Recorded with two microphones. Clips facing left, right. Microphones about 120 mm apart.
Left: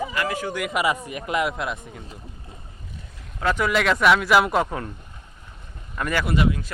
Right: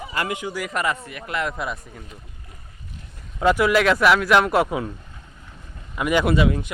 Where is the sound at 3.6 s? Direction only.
Centre (ahead or behind).